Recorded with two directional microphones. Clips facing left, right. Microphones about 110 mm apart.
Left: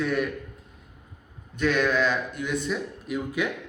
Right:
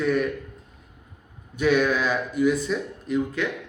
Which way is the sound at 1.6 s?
10° right (ahead or behind).